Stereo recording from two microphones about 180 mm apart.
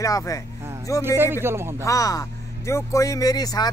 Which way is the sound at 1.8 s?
20° left (ahead or behind).